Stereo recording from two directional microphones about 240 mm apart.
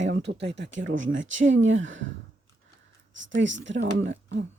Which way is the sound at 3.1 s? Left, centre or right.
Right.